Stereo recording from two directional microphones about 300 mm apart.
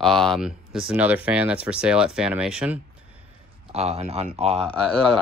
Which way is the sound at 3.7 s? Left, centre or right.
Right.